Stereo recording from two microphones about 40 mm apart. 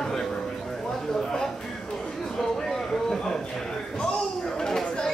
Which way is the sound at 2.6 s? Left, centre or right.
Centre.